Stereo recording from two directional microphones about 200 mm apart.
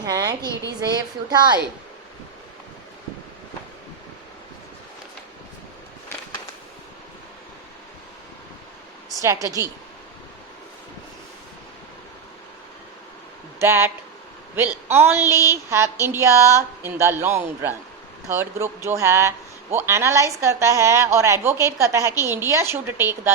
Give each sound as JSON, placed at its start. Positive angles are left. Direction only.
{"t": 0.0, "sound": "a woman's voice", "side_deg": -15}
{"t": 9.2, "sound": "a woman's voice", "side_deg": -15}
{"t": 13.6, "sound": "a woman's voice", "side_deg": -10}